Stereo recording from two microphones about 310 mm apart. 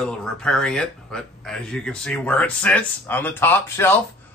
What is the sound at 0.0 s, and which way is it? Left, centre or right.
Speech, centre.